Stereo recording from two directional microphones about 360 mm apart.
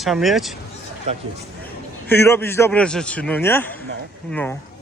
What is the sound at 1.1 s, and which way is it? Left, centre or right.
Speech, centre.